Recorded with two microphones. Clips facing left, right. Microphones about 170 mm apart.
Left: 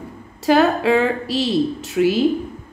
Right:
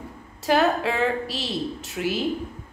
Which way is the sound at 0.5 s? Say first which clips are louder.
Left 6 dB; 90° left.